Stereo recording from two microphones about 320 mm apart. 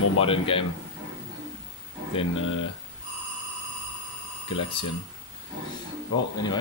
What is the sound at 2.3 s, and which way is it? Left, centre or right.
Speech, left.